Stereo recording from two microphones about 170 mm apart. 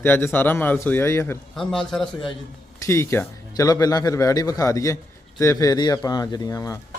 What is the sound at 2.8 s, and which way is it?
A man's voice, 15° left (ahead or behind).